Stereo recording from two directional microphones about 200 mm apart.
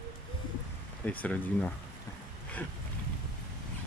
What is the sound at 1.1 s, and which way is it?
Speech, 5° left (ahead or behind).